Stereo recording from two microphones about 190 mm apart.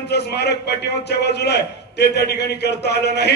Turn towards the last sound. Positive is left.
turn(degrees=60)  # may be behind; listen again after turning